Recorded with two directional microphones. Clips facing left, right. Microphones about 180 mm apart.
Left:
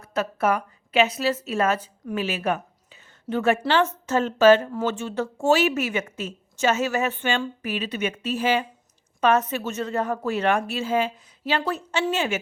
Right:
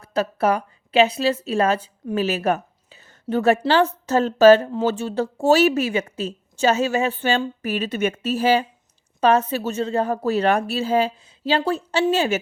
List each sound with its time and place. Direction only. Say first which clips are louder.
0.0 s a woman's voice: right 3 dB; 30° right (ahead or behind)